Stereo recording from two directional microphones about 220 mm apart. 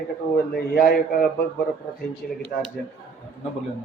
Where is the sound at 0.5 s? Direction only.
45° left (ahead or behind).